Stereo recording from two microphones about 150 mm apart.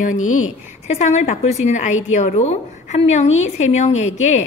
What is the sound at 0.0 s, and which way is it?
Speech, 60° left (ahead or behind).